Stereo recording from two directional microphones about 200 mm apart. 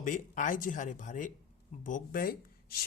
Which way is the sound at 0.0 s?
40° left (ahead or behind).